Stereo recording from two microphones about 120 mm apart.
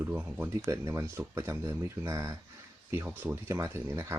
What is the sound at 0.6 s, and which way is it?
Speech, 25° right (ahead or behind).